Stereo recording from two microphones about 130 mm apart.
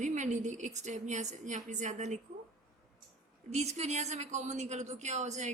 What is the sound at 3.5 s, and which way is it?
A woman's voice, 60° right (ahead or behind).